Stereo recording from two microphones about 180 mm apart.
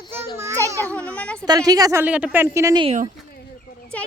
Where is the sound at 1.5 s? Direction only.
20° right (ahead or behind).